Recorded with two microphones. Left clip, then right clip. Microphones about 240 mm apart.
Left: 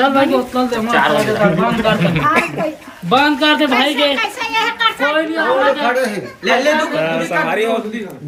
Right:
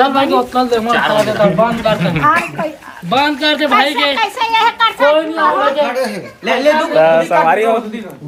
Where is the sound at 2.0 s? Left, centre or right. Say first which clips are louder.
Right 2 dB; centre.